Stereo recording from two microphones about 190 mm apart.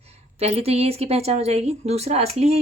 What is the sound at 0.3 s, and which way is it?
Speech, 35° right (ahead or behind).